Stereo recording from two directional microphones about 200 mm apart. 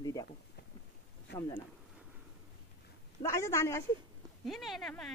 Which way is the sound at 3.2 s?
15° left (ahead or behind).